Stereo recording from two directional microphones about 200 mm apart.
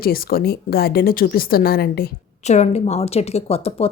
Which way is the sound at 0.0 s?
50° left (ahead or behind).